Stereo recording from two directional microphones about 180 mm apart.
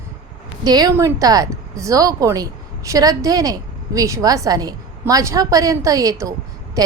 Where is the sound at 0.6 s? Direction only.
20° right (ahead or behind).